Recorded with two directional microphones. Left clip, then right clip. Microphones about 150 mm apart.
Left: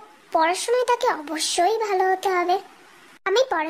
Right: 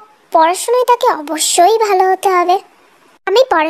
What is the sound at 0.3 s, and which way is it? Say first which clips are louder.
A child's voice: right 9 dB; 30° right (ahead or behind).